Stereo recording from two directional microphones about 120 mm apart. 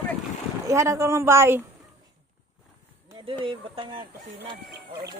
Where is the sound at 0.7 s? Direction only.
25° right (ahead or behind).